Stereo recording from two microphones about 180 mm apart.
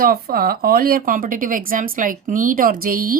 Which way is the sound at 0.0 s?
55° right (ahead or behind).